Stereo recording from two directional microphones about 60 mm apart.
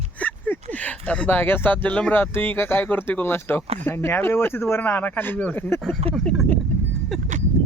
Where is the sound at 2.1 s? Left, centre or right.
Left.